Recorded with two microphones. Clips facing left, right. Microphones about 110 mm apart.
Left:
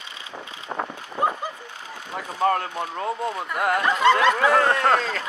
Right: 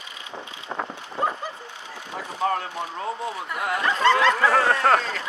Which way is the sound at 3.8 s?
10° left (ahead or behind).